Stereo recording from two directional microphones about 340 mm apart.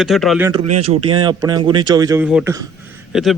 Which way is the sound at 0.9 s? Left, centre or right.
Centre.